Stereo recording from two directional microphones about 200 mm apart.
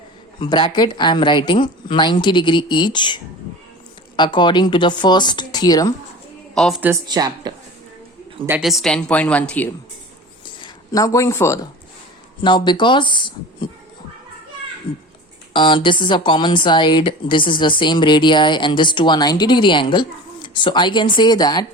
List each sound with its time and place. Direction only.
0.3 s speech: 25° left (ahead or behind)
4.2 s speech: 20° left (ahead or behind)
6.5 s a woman's voice: centre (ahead or behind)
7.1 s a woman's voice: 20° right (ahead or behind)
8.4 s a woman's voice: 5° right (ahead or behind)
10.9 s speech: 15° left (ahead or behind)
15.5 s speech: 25° left (ahead or behind)